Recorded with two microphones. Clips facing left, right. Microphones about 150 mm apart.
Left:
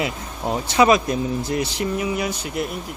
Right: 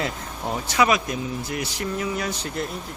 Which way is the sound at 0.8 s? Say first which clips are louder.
Left 6 dB; 30° left (ahead or behind).